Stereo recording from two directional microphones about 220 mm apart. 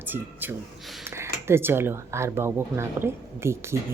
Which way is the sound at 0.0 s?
10° right (ahead or behind).